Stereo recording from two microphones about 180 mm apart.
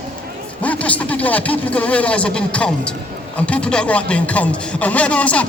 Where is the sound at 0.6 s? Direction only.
10° left (ahead or behind).